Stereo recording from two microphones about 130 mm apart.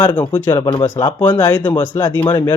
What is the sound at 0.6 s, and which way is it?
Speech, 45° left (ahead or behind).